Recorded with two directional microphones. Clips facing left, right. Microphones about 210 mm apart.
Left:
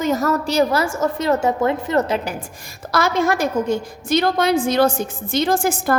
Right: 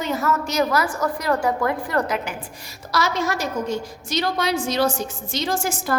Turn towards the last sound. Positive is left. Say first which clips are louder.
# left 6 dB
turn(degrees=55)  # may be behind; listen again after turning